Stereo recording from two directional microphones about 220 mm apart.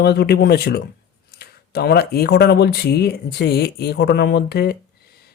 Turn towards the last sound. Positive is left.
turn(degrees=45)  # may be behind; listen again after turning